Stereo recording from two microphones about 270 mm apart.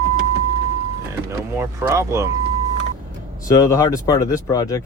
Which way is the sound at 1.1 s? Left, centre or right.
Centre.